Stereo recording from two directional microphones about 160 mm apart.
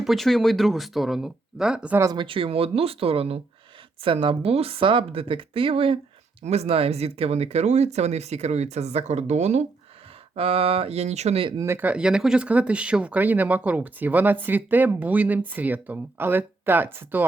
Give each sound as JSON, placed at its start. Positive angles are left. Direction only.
{"t": 0.0, "sound": "speech", "side_deg": 0}
{"t": 2.0, "sound": "speech", "side_deg": -25}
{"t": 11.6, "sound": "speech", "side_deg": -15}